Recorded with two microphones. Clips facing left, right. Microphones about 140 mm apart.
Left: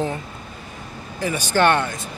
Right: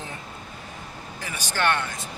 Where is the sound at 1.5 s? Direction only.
30° left (ahead or behind).